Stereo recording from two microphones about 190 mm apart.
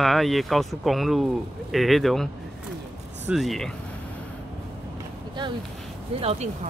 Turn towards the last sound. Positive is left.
turn(degrees=-30)  # may be behind; listen again after turning